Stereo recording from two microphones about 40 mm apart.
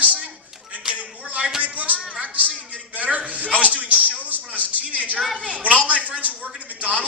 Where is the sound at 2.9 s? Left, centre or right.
Right.